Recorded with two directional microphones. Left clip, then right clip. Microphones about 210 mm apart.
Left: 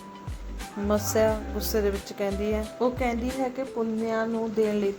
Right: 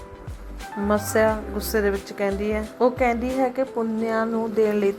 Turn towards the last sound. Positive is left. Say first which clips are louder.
# right 5 dB
turn(degrees=-20)  # may be behind; listen again after turning